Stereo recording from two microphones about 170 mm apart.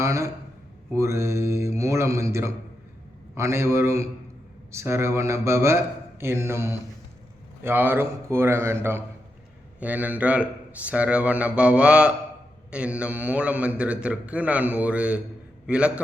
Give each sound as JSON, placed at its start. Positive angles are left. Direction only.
{"t": 0.0, "sound": "a man's voice", "side_deg": -15}